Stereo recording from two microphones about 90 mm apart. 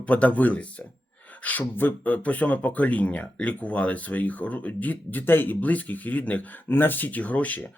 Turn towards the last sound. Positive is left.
turn(degrees=15)  # may be behind; listen again after turning